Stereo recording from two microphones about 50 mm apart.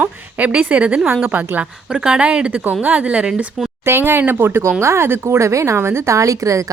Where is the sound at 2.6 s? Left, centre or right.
Right.